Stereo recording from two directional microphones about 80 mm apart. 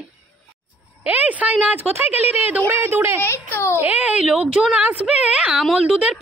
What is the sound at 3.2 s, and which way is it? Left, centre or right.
Speech, left.